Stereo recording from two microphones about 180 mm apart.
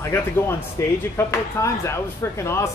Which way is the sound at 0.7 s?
15° left (ahead or behind).